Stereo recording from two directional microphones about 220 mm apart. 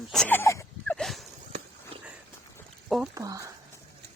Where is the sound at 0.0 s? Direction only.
Centre (ahead or behind).